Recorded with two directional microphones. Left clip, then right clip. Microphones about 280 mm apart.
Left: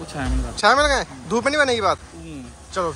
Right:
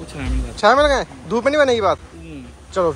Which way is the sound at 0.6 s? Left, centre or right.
Centre.